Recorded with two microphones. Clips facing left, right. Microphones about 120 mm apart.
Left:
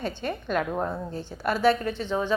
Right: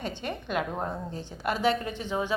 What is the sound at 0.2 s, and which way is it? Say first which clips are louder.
A woman's voice: left 3 dB; 15° right (ahead or behind).